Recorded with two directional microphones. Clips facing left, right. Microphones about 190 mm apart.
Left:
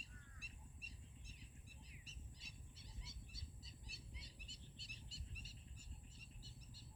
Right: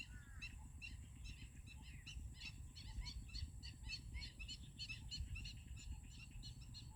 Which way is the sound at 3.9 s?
65° right (ahead or behind).